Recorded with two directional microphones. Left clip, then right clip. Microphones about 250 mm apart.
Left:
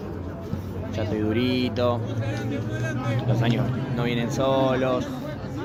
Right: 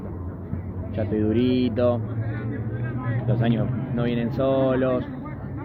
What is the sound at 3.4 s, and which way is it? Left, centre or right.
A man's voice, centre.